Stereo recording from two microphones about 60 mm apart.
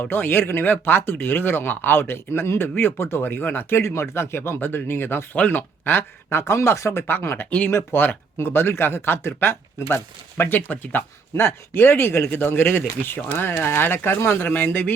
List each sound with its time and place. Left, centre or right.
0.0 s speech: left
7.1 s speech: left